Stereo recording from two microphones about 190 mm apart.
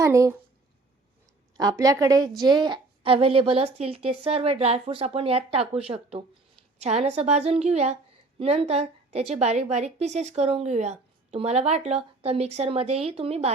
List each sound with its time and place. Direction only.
0.0 s speech: 15° right (ahead or behind)
1.5 s a woman's voice: 20° right (ahead or behind)